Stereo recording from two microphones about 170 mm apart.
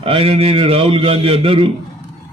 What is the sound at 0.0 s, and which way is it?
A man's voice, 35° right (ahead or behind).